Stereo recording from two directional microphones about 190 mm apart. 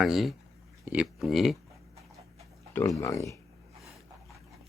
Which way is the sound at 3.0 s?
15° left (ahead or behind).